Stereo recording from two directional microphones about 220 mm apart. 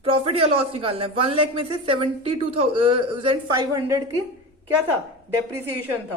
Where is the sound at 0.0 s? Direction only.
25° right (ahead or behind).